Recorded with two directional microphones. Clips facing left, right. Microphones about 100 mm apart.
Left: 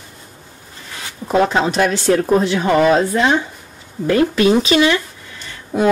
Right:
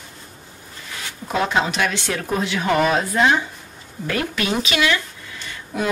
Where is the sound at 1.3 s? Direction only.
35° left (ahead or behind).